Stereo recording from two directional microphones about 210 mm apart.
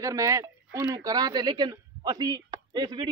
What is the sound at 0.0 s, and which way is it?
A man's voice, 15° right (ahead or behind).